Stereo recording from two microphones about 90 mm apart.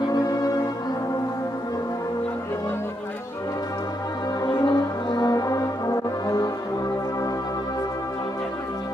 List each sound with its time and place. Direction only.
0.0 s music: 45° left (ahead or behind)
4.4 s brass instrument: 50° left (ahead or behind)